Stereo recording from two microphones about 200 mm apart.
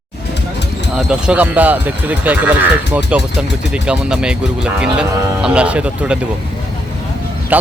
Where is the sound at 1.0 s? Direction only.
5° right (ahead or behind).